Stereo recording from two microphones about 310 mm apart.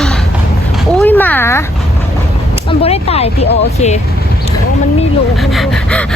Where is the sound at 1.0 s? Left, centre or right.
Centre.